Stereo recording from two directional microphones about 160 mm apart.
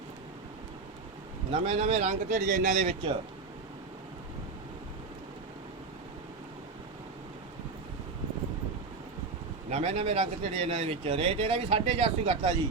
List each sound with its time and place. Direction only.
1.5 s a man's voice: 40° right (ahead or behind)
9.6 s speech: 40° right (ahead or behind)